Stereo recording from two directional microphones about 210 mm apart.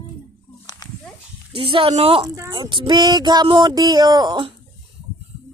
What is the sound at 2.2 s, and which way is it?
Speech, 15° right (ahead or behind).